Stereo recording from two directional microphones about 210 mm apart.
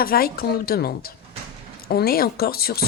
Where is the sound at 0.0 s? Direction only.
45° left (ahead or behind).